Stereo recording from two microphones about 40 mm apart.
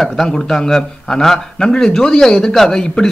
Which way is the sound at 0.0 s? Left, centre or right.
Centre.